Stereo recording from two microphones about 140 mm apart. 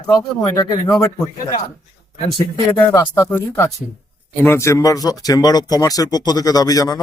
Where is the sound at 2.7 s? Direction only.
25° left (ahead or behind).